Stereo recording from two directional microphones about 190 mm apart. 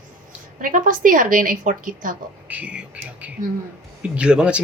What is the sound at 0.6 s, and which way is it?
A woman's voice, 45° right (ahead or behind).